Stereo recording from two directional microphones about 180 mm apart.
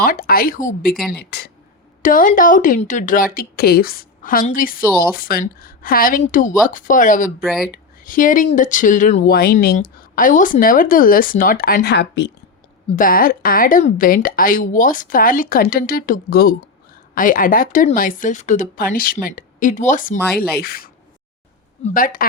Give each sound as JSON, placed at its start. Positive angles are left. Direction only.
{"t": 0.0, "sound": "a woman's voice", "side_deg": 55}
{"t": 1.2, "sound": "speech", "side_deg": 65}
{"t": 2.0, "sound": "a woman's voice", "side_deg": 50}
{"t": 7.4, "sound": "speech", "side_deg": 0}
{"t": 8.0, "sound": "a woman's voice", "side_deg": 50}
{"t": 13.0, "sound": "a woman's voice", "side_deg": 50}